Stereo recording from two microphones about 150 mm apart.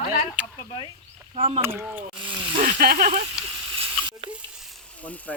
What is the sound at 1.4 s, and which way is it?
Speech, 40° right (ahead or behind).